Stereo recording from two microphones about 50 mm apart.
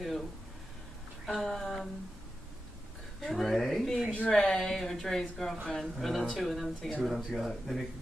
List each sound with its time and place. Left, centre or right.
1.2 s speech: centre
3.2 s speech: centre